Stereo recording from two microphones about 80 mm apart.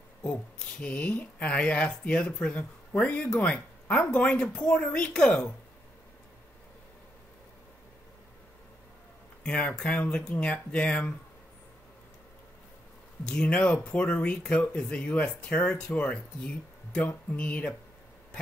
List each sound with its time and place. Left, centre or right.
0.2 s speech: centre
9.4 s speech: centre
13.2 s speech: centre